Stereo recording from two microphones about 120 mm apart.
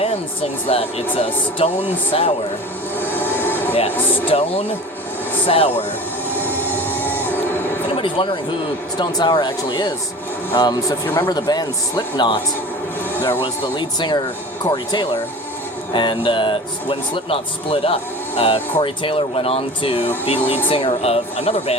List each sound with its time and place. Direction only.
0.7 s speech: 55° left (ahead or behind)
3.0 s vehicle: 15° left (ahead or behind)
3.4 s a sound: 15° left (ahead or behind)
4.3 s speech: 55° left (ahead or behind)
6.3 s train: 15° left (ahead or behind)
6.8 s printer: 15° left (ahead or behind)
7.9 s a man's voice: 45° left (ahead or behind); by 11.3 s 20° left (ahead or behind)
11.3 s a man's voice: 35° left (ahead or behind)
13.1 s speech: 15° left (ahead or behind)
13.4 s a man's voice: 40° left (ahead or behind); by 21.8 s 60° left (ahead or behind)